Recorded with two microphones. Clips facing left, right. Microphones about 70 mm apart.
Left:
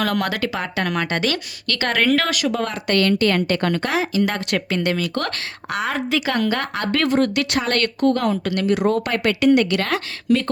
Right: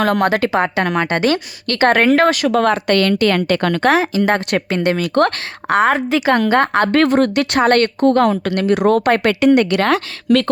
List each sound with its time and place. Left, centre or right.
0.0 s a woman's voice: right
2.5 s a woman's voice: right
3.9 s a woman's voice: right
4.9 s a woman's voice: right
8.2 s a woman's voice: right
9.7 s a woman's voice: right